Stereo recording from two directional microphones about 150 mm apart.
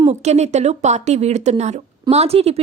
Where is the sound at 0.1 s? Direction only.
50° right (ahead or behind).